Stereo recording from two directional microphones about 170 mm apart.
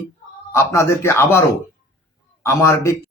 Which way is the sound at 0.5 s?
15° left (ahead or behind).